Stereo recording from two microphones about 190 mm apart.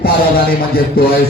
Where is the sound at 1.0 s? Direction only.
50° left (ahead or behind).